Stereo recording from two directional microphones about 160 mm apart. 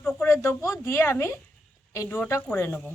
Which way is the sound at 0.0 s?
5° left (ahead or behind).